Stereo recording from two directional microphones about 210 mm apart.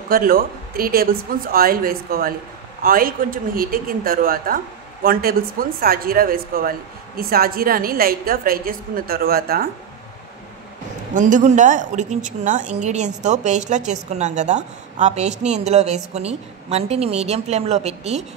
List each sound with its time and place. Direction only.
0.1 s a woman's voice: 45° right (ahead or behind)
11.1 s a woman's voice: 35° right (ahead or behind)